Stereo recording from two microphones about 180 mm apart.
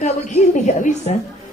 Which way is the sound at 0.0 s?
45° left (ahead or behind).